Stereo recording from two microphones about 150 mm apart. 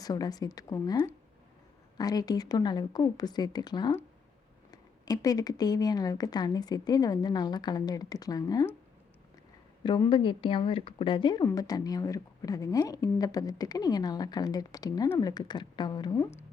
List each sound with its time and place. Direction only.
0.0 s speech: 25° left (ahead or behind)
9.8 s speech: 30° left (ahead or behind)